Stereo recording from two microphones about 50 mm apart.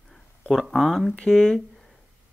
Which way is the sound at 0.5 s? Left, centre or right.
Centre.